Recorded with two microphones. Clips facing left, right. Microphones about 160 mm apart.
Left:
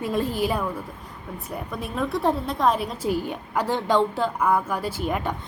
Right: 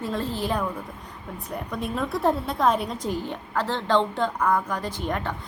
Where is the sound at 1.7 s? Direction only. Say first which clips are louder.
Left 1 dB; 5° left (ahead or behind).